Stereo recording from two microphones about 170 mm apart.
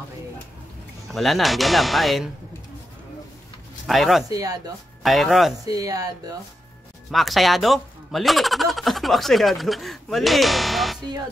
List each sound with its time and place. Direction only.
1.0 s speech: centre (ahead or behind)
3.8 s speech: centre (ahead or behind)
4.3 s speech: 20° right (ahead or behind)
5.0 s speech: centre (ahead or behind)
5.7 s speech: 20° right (ahead or behind)
7.1 s speech: centre (ahead or behind)